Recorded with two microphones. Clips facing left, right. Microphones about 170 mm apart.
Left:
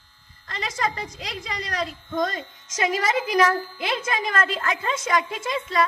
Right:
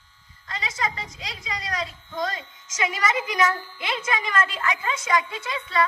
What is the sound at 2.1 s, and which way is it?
Speech, 50° left (ahead or behind).